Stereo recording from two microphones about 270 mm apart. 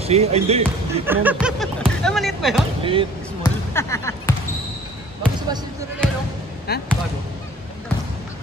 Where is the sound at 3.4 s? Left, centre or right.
Centre.